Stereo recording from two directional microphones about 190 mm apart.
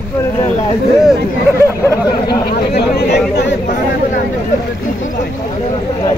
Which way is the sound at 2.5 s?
60° left (ahead or behind).